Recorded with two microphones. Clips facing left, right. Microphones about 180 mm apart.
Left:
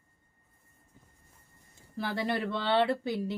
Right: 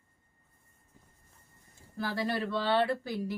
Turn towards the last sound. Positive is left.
turn(degrees=20)  # may be behind; listen again after turning